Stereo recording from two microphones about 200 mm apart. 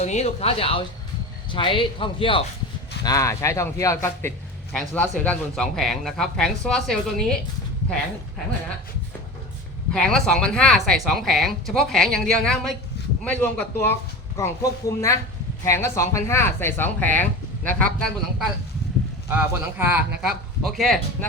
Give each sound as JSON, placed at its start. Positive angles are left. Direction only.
{"t": 0.0, "sound": "speech", "side_deg": 35}
{"t": 4.7, "sound": "speech", "side_deg": 0}
{"t": 9.9, "sound": "speech", "side_deg": 5}
{"t": 19.3, "sound": "speech", "side_deg": -10}